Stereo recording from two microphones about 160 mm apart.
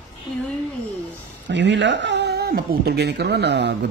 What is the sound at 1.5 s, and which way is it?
Speech, 90° right.